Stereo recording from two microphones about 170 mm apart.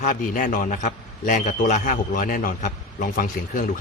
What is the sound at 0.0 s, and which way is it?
A man's voice, 50° left (ahead or behind).